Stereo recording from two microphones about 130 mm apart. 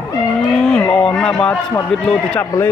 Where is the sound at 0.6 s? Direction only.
5° left (ahead or behind).